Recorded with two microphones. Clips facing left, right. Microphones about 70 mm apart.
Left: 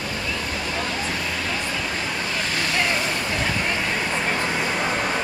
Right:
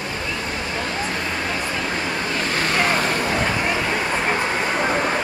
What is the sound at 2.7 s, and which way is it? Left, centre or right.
Vehicle, right.